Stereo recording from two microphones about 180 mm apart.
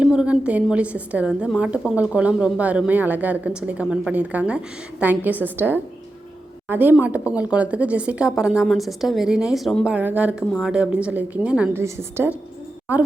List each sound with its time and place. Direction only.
0.0 s a woman's voice: 5° right (ahead or behind)